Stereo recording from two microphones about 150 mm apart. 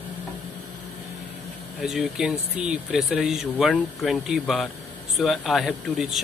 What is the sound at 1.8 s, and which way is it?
Speech, centre (ahead or behind).